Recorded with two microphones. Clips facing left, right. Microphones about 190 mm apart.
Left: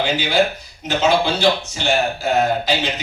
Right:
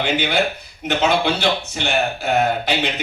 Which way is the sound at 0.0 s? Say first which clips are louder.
Left 2 dB; 55° right (ahead or behind).